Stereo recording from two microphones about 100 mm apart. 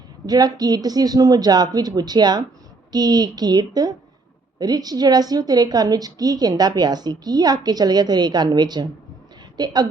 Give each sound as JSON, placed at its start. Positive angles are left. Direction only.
{"t": 0.3, "sound": "a woman's voice", "side_deg": -40}